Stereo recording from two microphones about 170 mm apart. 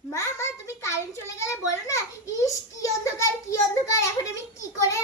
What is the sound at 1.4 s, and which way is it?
Children playing, 15° left (ahead or behind).